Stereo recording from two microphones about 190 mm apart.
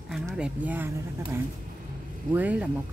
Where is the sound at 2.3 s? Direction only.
10° right (ahead or behind).